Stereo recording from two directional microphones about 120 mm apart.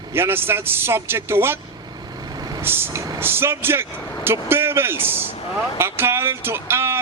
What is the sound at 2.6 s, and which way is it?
Speech, 20° right (ahead or behind).